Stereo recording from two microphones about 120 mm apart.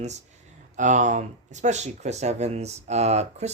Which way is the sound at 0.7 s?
90° right.